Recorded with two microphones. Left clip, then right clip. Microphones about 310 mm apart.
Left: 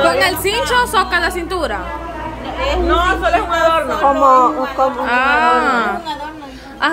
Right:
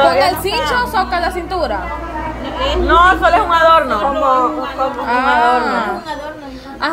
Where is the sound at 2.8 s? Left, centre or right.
Right.